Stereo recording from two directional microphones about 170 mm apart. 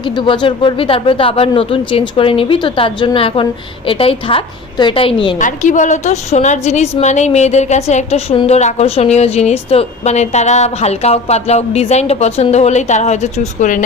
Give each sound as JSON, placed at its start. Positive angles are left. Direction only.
{"t": 0.0, "sound": "a woman's voice", "side_deg": 25}
{"t": 5.4, "sound": "a woman's voice", "side_deg": 50}